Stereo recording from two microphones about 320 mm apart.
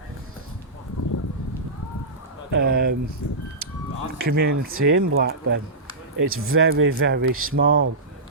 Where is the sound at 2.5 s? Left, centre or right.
Right.